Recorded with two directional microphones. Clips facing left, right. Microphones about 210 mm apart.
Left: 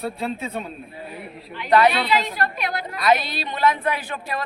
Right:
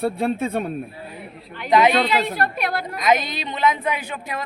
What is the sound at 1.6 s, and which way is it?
Speech, 15° right (ahead or behind).